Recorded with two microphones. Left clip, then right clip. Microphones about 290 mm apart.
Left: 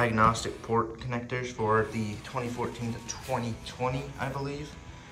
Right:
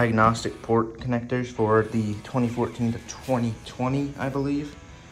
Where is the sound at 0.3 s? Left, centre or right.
Left.